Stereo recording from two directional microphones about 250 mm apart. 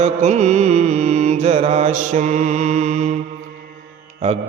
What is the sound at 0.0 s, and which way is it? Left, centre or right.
Mantra, right.